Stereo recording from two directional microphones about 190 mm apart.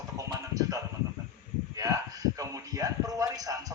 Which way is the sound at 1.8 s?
20° right (ahead or behind).